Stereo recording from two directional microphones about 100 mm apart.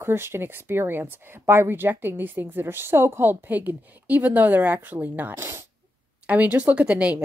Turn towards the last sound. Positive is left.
turn(degrees=-10)  # may be behind; listen again after turning